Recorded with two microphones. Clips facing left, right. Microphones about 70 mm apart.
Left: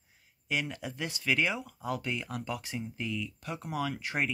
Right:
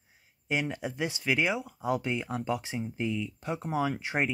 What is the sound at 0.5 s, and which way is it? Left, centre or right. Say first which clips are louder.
Speech: right 3 dB; right.